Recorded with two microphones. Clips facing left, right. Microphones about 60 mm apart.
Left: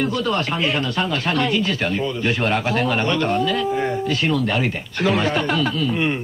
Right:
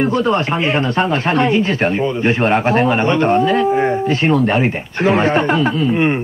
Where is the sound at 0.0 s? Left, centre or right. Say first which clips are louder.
Right 6 dB; right.